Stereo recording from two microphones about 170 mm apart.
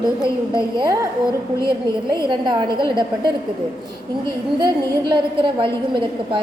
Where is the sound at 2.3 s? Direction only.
25° right (ahead or behind).